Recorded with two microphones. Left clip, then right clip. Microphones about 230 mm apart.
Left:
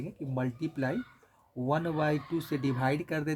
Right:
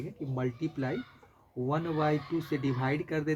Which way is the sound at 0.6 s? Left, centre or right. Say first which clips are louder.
Left 1 dB; left.